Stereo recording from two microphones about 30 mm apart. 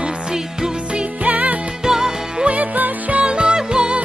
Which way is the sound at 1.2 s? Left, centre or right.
Right.